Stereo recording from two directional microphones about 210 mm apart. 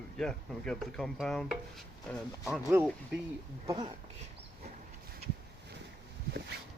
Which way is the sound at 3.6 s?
20° right (ahead or behind).